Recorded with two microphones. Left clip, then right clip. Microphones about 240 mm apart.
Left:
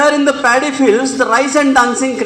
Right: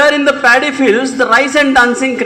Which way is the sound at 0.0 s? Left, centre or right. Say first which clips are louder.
Right 2 dB; right.